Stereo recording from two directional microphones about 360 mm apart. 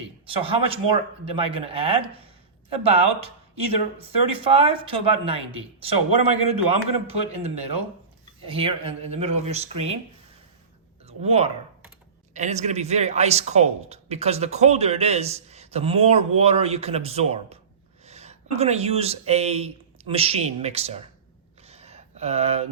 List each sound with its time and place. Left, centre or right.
0.3 s speech: centre
8.4 s speech: centre
11.0 s speech: centre
21.7 s a sound: centre